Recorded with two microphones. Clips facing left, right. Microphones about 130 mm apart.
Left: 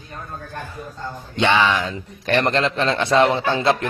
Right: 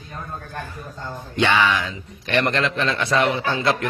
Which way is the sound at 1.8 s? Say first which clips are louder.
Left 4 dB; 50° left (ahead or behind).